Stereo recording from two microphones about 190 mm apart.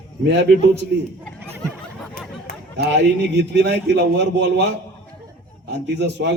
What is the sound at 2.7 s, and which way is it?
A man's voice, 65° right (ahead or behind).